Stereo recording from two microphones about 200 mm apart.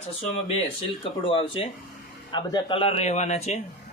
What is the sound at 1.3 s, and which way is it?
Speech, 25° left (ahead or behind).